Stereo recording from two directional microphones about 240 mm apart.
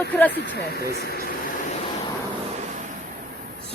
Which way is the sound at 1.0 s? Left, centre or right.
Left.